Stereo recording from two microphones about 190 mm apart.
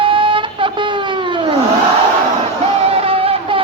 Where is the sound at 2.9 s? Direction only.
30° right (ahead or behind).